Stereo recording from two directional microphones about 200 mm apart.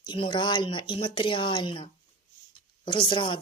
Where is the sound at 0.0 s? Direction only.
20° left (ahead or behind).